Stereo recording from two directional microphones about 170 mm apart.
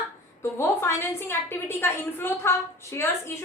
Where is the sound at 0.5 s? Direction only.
15° left (ahead or behind).